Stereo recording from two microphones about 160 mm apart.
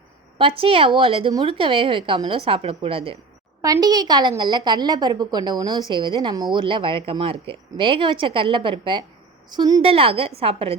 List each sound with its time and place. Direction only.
0.3 s speech: 35° right (ahead or behind)
3.6 s a woman's voice: 25° right (ahead or behind)